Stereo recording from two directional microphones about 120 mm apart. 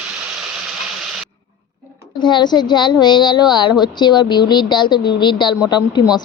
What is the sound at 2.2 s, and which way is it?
Speech, 40° left (ahead or behind).